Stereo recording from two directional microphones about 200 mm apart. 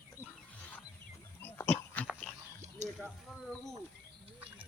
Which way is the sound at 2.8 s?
35° right (ahead or behind).